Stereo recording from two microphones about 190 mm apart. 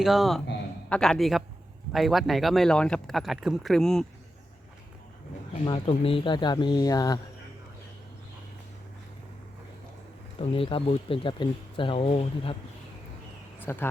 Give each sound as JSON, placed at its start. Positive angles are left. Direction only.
{"t": 0.0, "sound": "speech", "side_deg": 0}
{"t": 5.6, "sound": "speech", "side_deg": 25}
{"t": 10.3, "sound": "speech", "side_deg": 30}
{"t": 13.6, "sound": "speech", "side_deg": 10}